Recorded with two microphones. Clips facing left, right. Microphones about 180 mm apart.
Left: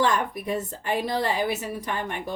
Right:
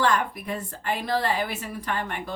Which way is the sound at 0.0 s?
20° left (ahead or behind).